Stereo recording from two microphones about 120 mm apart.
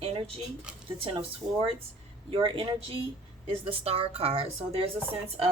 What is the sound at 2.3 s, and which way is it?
Speech, 50° right (ahead or behind).